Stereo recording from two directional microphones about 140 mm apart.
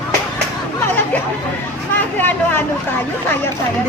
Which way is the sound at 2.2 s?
15° left (ahead or behind).